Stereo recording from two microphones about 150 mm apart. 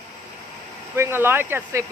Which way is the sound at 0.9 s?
15° right (ahead or behind).